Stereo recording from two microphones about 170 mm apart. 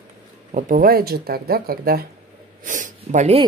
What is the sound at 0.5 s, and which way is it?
Speech, 50° right (ahead or behind).